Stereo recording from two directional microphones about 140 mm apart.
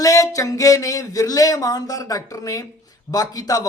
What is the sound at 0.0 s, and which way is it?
Speech, 25° left (ahead or behind).